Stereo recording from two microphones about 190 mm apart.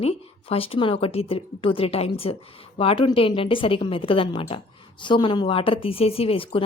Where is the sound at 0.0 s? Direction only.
30° left (ahead or behind).